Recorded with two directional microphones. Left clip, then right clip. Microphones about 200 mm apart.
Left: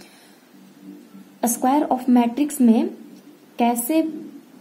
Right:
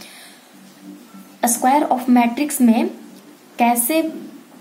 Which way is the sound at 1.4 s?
20° left (ahead or behind).